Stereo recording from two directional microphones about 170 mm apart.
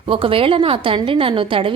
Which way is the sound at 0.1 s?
30° right (ahead or behind).